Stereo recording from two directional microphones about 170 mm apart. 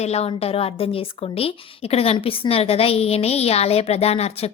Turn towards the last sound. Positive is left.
turn(degrees=35)  # may be behind; listen again after turning